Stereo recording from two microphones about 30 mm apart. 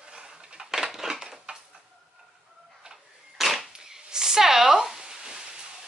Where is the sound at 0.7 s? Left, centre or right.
Centre.